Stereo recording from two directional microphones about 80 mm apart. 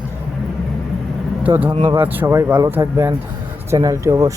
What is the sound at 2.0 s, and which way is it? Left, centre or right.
Speech, right.